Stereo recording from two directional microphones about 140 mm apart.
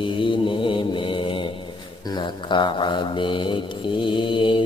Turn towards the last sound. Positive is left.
turn(degrees=35)  # may be behind; listen again after turning